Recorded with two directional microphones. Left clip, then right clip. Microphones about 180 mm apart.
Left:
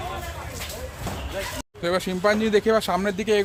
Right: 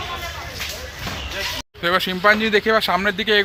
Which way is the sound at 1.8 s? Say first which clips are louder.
Right 5 dB; 5° left (ahead or behind).